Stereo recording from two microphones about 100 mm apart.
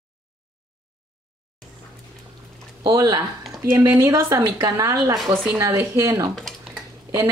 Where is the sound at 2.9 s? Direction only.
40° right (ahead or behind).